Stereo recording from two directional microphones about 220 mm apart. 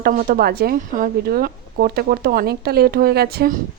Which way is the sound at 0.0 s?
40° right (ahead or behind).